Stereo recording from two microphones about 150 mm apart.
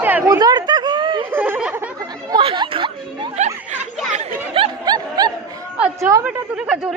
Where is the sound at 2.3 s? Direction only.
30° right (ahead or behind).